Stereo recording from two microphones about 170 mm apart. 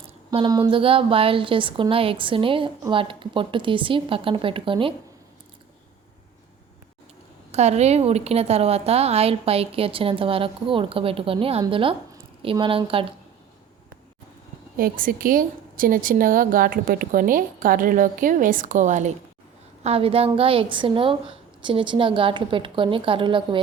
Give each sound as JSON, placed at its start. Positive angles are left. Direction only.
{"t": 0.3, "sound": "a woman's voice", "side_deg": -25}
{"t": 7.5, "sound": "a woman's voice", "side_deg": -40}
{"t": 14.8, "sound": "a woman's voice", "side_deg": -55}
{"t": 19.8, "sound": "a woman's voice", "side_deg": -35}